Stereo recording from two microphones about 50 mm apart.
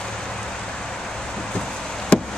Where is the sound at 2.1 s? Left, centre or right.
Left.